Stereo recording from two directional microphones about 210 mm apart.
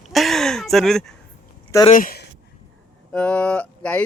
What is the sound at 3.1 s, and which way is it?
Speech, 5° left (ahead or behind).